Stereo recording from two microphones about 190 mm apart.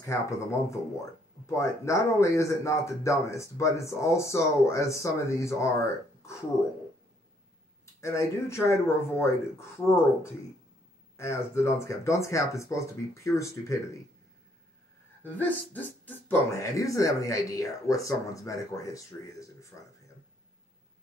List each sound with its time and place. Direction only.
0.0 s speech: 15° left (ahead or behind)
7.8 s speech: 15° left (ahead or behind)
15.3 s speech: 10° left (ahead or behind)